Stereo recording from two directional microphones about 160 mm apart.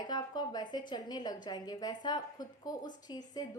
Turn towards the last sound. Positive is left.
turn(degrees=25)  # may be behind; listen again after turning